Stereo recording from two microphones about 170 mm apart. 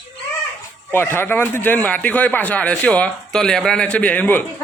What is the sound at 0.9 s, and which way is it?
Speech, 15° left (ahead or behind).